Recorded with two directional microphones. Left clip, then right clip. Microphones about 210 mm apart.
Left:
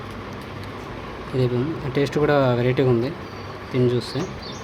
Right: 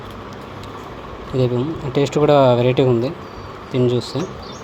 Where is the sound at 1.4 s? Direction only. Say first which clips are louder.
Right 4 dB; 15° right (ahead or behind).